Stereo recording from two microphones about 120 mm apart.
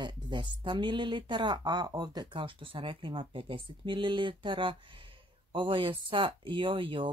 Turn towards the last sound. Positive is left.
turn(degrees=-45)  # may be behind; listen again after turning